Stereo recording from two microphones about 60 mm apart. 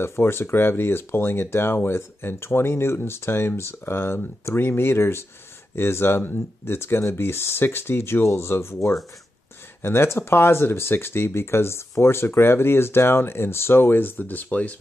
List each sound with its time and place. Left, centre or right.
0.0 s speech: left